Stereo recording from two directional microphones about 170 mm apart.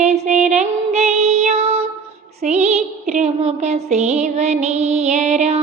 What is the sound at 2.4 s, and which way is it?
Child singing, 40° right (ahead or behind).